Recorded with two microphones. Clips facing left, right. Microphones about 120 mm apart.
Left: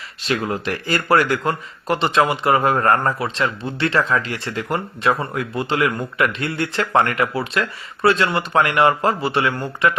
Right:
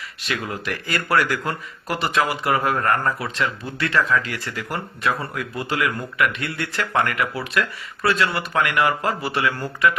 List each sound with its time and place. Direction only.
0.2 s speech: 30° left (ahead or behind)